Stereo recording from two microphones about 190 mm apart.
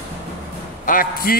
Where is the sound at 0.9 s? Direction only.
45° left (ahead or behind).